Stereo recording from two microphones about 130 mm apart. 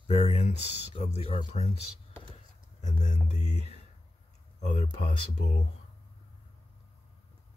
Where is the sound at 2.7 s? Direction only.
65° left (ahead or behind).